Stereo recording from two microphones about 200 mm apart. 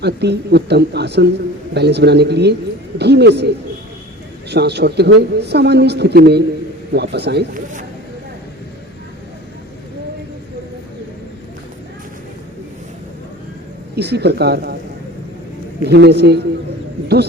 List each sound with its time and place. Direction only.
0.0 s speech: 55° right (ahead or behind)
13.9 s speech: 55° right (ahead or behind)
15.8 s speech: 55° right (ahead or behind)